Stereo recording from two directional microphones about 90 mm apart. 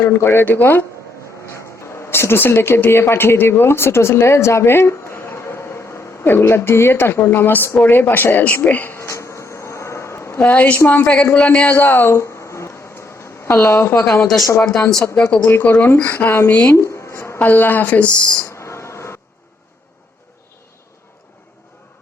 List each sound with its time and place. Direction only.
0.0 s speech: 25° left (ahead or behind)
2.0 s speech: 25° left (ahead or behind)
6.2 s speech: 25° left (ahead or behind)
9.0 s vehicle: 35° left (ahead or behind)
10.3 s speech: 15° left (ahead or behind)
13.7 s speech: 30° left (ahead or behind)
13.9 s speech: 10° left (ahead or behind)
15.4 s speech: 25° left (ahead or behind)
18.5 s a sound: 30° left (ahead or behind)